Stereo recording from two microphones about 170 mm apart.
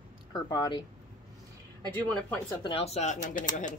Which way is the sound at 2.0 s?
10° left (ahead or behind).